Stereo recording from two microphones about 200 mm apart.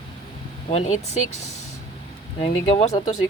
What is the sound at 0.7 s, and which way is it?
Speech, 35° left (ahead or behind).